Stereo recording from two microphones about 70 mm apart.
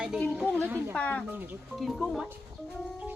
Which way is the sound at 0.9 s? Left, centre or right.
Centre.